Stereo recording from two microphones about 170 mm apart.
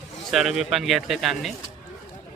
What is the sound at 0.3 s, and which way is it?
Speech, centre (ahead or behind).